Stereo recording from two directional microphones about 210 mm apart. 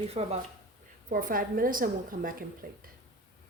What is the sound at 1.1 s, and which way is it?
A woman's voice, 40° right (ahead or behind).